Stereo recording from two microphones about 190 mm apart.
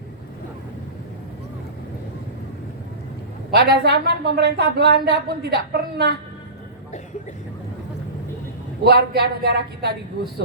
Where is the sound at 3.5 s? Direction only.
60° right (ahead or behind).